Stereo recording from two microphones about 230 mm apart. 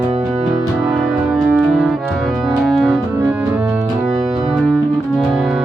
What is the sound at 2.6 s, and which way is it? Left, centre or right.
Organ, centre.